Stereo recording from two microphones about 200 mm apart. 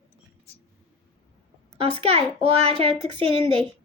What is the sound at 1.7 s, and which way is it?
A woman's voice, 30° right (ahead or behind).